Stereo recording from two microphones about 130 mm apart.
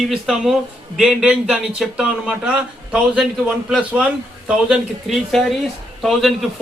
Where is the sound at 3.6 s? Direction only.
5° right (ahead or behind).